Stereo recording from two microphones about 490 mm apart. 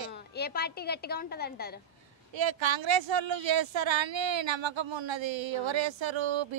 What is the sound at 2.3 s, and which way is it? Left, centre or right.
Speech, right.